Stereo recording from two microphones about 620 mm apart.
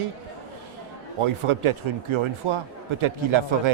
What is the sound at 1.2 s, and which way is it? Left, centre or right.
A man's voice, right.